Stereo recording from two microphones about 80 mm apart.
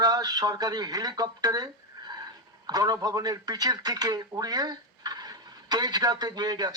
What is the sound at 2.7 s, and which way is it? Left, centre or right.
Speech, right.